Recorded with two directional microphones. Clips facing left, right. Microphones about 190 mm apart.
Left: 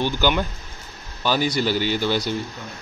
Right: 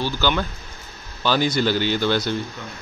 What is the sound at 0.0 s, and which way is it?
A man's voice, 15° left (ahead or behind).